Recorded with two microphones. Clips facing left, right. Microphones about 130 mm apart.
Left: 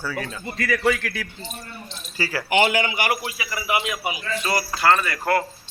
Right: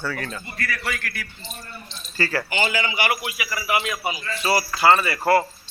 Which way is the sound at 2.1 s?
10° left (ahead or behind).